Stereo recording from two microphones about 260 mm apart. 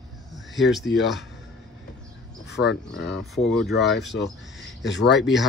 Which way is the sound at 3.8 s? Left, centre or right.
Left.